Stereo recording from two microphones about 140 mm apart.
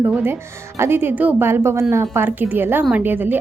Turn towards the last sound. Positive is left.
turn(degrees=-15)  # may be behind; listen again after turning